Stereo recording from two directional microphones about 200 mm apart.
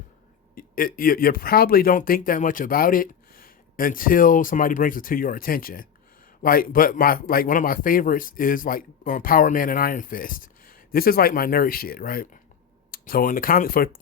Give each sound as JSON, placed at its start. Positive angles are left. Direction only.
{"t": 0.5, "sound": "a man's voice", "side_deg": 45}